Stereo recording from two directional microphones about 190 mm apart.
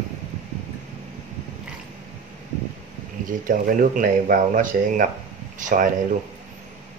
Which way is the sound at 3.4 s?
45° right (ahead or behind).